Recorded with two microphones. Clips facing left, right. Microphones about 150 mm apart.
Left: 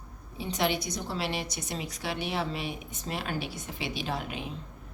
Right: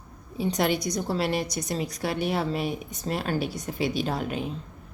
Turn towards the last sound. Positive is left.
turn(degrees=-40)  # may be behind; listen again after turning